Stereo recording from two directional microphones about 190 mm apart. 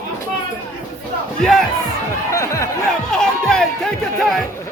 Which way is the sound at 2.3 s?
15° left (ahead or behind).